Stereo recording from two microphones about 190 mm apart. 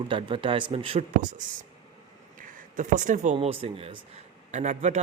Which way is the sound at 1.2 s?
40° right (ahead or behind).